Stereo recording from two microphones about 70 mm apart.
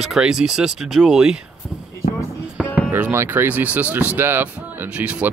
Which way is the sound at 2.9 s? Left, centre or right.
Right.